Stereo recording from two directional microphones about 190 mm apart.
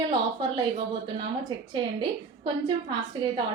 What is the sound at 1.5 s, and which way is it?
A woman's voice, 25° right (ahead or behind).